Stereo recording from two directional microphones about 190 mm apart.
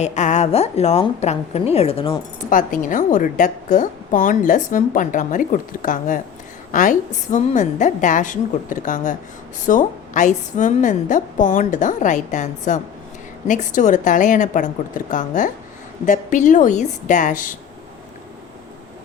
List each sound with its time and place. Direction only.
0.0 s a woman's voice: 40° left (ahead or behind)
2.5 s a woman's voice: 45° left (ahead or behind)